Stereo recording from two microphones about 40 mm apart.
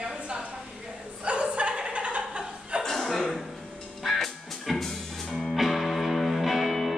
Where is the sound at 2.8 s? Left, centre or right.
Centre.